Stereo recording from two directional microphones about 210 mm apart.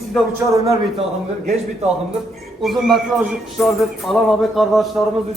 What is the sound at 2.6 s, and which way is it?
Speech, centre (ahead or behind).